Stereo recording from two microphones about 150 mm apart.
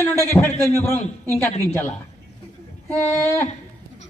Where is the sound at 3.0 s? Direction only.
15° left (ahead or behind).